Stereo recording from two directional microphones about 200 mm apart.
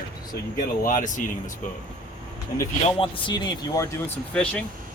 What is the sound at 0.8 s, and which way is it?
Speech, 40° left (ahead or behind).